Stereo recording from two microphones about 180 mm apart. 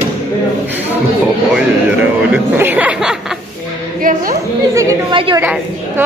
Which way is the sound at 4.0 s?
50° right (ahead or behind).